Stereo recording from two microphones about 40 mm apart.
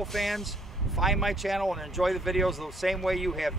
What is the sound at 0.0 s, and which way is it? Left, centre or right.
Speech, centre.